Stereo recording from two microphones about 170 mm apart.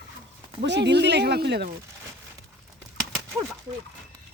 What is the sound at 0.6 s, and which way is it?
Speech, 90° right.